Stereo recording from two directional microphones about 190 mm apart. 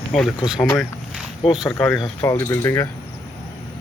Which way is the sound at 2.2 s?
15° left (ahead or behind).